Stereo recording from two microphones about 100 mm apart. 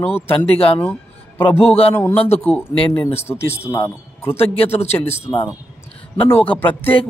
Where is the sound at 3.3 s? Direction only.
25° left (ahead or behind).